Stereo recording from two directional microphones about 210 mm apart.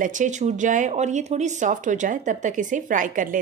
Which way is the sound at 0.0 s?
35° right (ahead or behind).